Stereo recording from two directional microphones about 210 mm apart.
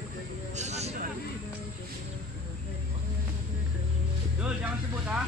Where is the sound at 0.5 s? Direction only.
30° right (ahead or behind).